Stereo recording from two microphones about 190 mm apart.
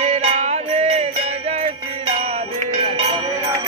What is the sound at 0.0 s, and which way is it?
Music, 35° right (ahead or behind).